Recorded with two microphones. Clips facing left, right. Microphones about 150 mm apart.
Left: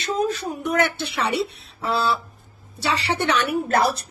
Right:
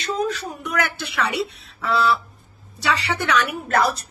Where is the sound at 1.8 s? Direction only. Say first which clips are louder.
Right 2 dB; 30° left (ahead or behind).